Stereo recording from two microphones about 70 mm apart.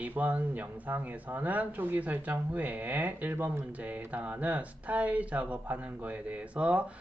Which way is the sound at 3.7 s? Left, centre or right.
Right.